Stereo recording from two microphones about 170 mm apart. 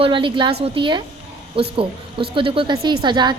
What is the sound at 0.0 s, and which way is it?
A woman's voice, 30° right (ahead or behind).